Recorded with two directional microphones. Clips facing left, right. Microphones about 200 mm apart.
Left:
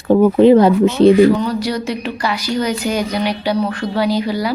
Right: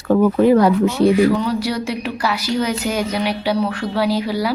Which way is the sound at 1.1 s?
5° right (ahead or behind).